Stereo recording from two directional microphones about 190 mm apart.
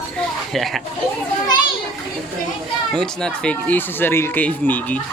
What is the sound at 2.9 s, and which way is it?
Speech, 5° left (ahead or behind).